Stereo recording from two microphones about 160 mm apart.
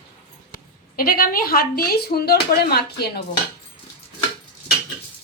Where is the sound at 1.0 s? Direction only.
65° left (ahead or behind); by 3.2 s 80° left.